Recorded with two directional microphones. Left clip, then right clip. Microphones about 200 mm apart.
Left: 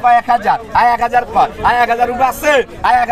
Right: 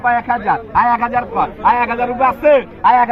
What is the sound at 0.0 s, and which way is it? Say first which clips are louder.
A man's voice: left 5 dB; 80° left.